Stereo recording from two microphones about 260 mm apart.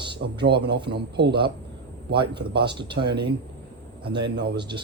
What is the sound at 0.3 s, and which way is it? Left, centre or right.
Speech, right.